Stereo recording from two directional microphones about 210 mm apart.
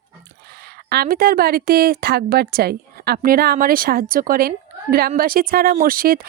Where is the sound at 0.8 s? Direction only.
50° right (ahead or behind).